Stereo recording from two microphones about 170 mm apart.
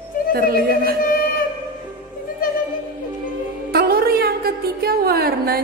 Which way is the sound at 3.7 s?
65° right (ahead or behind).